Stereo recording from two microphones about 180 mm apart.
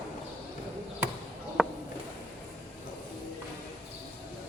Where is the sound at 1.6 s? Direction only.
Centre (ahead or behind).